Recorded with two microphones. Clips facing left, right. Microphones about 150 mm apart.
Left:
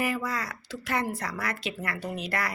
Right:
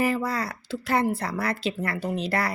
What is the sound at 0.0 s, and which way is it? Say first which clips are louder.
Speech: right 5 dB; 30° right (ahead or behind).